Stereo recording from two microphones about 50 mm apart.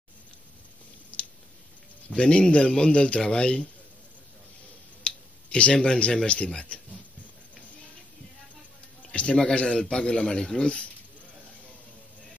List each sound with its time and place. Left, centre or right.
1.1 s squish: left
2.0 s a man's voice: left
5.0 s speech: left
9.1 s a man's voice: left